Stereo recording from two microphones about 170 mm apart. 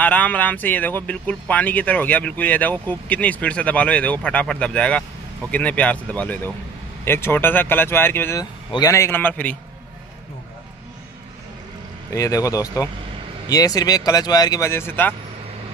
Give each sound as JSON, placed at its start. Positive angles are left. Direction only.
{"t": 0.0, "sound": "speech", "side_deg": 10}
{"t": 12.1, "sound": "speech", "side_deg": 20}